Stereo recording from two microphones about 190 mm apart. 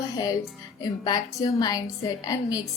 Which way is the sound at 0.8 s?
20° left (ahead or behind).